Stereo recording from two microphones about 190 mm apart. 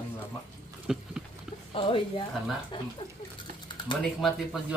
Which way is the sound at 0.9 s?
5° right (ahead or behind).